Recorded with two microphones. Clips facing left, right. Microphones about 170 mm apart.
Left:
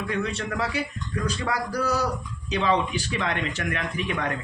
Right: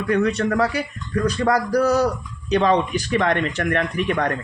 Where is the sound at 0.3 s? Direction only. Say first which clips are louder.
Right 9 dB; 40° right (ahead or behind).